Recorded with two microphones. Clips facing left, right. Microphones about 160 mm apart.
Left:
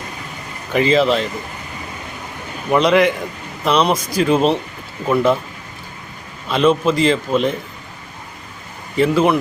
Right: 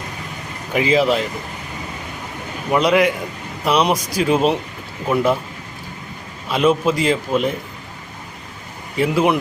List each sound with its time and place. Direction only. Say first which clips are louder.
0.7 s a man's voice: left 2 dB; 10° right (ahead or behind)
2.7 s a man's voice: left 2 dB; 5° right (ahead or behind)
6.5 s a man's voice: left 1 dB; 10° right (ahead or behind)
9.0 s a man's voice: left 2 dB; 10° right (ahead or behind)